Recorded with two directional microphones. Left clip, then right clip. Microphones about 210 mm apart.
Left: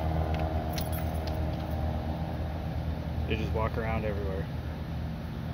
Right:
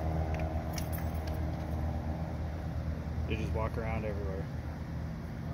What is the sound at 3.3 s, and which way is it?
Speech, centre (ahead or behind).